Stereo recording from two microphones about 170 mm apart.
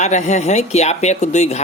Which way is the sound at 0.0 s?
45° left (ahead or behind).